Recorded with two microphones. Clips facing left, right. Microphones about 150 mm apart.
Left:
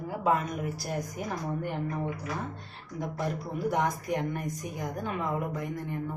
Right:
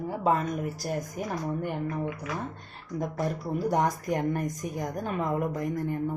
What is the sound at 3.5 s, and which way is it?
A woman's voice, 40° right (ahead or behind).